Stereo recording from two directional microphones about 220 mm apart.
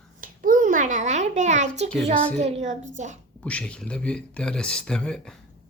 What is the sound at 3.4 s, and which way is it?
Speech, 5° left (ahead or behind).